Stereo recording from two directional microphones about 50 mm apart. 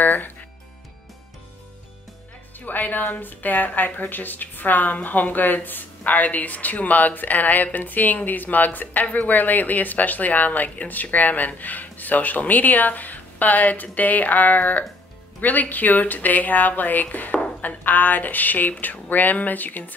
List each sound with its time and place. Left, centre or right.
0.0 s music: left
2.6 s music: left
3.2 s speech: left